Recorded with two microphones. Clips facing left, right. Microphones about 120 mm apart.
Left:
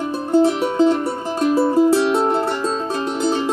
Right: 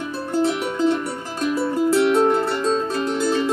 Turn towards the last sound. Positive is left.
turn(degrees=25)  # may be behind; listen again after turning